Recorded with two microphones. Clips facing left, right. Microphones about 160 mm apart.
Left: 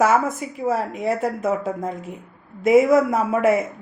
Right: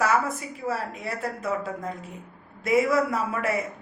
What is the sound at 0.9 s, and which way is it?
Speech, 20° left (ahead or behind).